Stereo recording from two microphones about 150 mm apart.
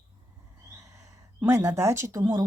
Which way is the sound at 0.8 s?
20° right (ahead or behind).